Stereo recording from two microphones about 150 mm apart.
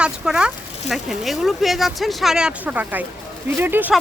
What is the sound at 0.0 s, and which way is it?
Speech, 5° right (ahead or behind).